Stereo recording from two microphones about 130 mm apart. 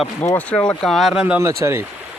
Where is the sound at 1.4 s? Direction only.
20° right (ahead or behind).